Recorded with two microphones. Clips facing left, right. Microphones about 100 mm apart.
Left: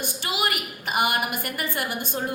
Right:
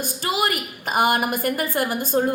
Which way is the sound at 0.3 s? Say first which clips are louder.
Right 5 dB; 40° right (ahead or behind).